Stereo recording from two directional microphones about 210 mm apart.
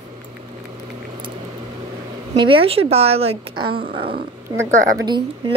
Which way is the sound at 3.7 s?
45° right (ahead or behind).